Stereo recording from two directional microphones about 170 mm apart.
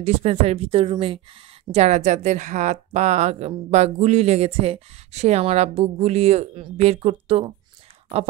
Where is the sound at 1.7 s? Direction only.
40° right (ahead or behind).